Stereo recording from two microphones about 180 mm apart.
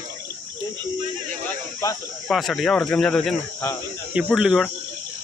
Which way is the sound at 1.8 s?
20° left (ahead or behind).